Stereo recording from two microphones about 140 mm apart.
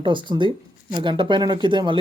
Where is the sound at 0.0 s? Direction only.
35° right (ahead or behind).